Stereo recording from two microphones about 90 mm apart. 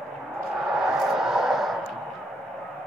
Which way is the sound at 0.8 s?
5° right (ahead or behind).